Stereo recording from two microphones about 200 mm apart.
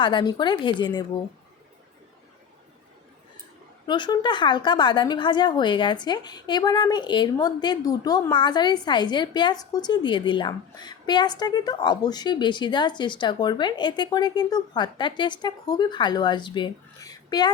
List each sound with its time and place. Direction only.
0.0 s a woman's voice: 20° left (ahead or behind)
3.8 s a woman's voice: 20° left (ahead or behind)